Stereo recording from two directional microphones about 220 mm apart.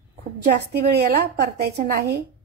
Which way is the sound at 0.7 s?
45° right (ahead or behind).